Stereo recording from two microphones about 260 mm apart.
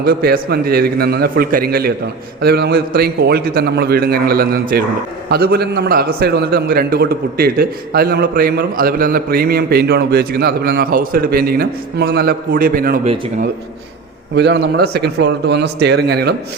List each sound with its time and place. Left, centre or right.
0.0 s a man's voice: right
14.3 s a man's voice: right